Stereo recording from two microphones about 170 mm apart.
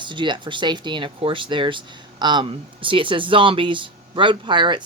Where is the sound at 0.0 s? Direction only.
30° right (ahead or behind).